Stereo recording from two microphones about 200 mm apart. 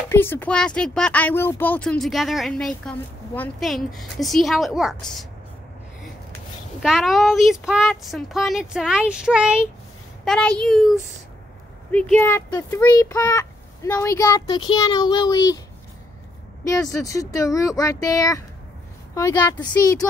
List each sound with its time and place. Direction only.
0.1 s speech: 10° left (ahead or behind)
6.8 s speech: centre (ahead or behind)
11.9 s a child's voice: 10° left (ahead or behind)
16.6 s a child's voice: 15° left (ahead or behind)